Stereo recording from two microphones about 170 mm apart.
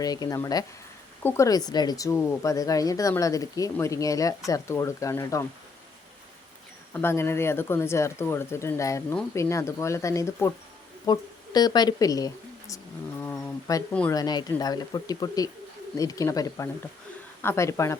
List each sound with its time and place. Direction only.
0.0 s a woman's voice: 20° left (ahead or behind)
6.9 s speech: 15° left (ahead or behind)
13.2 s a sound: 15° left (ahead or behind)
14.1 s a woman's voice: 25° left (ahead or behind)